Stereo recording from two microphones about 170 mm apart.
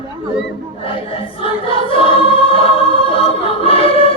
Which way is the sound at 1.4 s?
30° left (ahead or behind).